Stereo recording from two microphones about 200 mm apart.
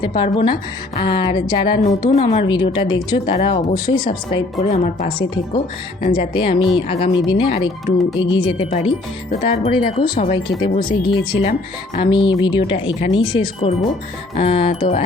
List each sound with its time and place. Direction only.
0.2 s speech: 25° left (ahead or behind)
4.6 s speech: 35° left (ahead or behind)
6.1 s speech: 25° left (ahead or behind)
10.6 s speech: 25° left (ahead or behind)